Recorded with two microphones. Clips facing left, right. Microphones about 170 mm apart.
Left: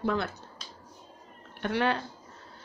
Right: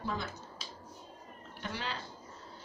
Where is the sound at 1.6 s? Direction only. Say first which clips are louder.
Left 12 dB; 60° left (ahead or behind).